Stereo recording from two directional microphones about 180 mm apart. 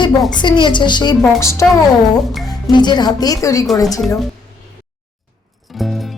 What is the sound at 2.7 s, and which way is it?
Speech, 25° left (ahead or behind).